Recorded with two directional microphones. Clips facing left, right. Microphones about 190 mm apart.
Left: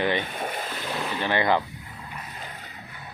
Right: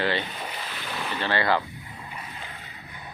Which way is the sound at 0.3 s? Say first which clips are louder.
Left 5 dB; 50° left (ahead or behind).